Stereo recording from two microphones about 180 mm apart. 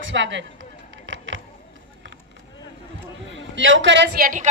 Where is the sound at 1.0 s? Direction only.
90° right.